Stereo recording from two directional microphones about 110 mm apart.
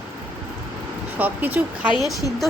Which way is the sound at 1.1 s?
15° right (ahead or behind).